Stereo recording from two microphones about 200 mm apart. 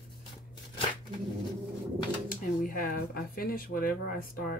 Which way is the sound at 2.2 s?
45° left (ahead or behind).